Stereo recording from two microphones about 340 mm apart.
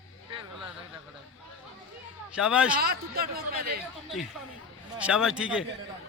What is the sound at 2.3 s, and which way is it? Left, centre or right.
Speech, centre.